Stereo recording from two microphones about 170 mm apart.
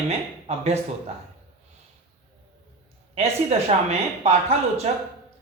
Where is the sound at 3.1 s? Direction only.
40° right (ahead or behind).